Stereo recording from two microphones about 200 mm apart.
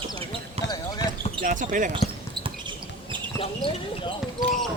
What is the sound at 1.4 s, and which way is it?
Basketball bounce, 40° right (ahead or behind).